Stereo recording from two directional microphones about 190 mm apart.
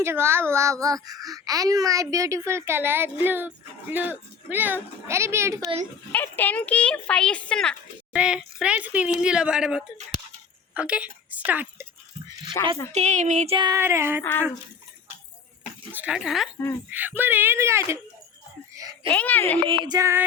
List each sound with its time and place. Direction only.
0.0 s a woman's voice: 15° right (ahead or behind)
6.1 s a woman's voice: 10° left (ahead or behind); by 11.9 s 10° right (ahead or behind)
12.6 s speech: 20° left (ahead or behind)
12.9 s a sound: 35° right (ahead or behind)
13.7 s a woman's voice: 15° right (ahead or behind)
15.9 s a woman's voice: 5° right (ahead or behind)
18.7 s a sound: 20° right (ahead or behind)
19.1 s speech: 10° left (ahead or behind)
19.6 s music: 25° right (ahead or behind)